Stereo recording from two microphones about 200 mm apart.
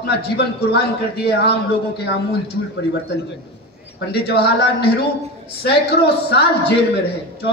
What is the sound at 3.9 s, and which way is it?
A man's voice, 55° left (ahead or behind).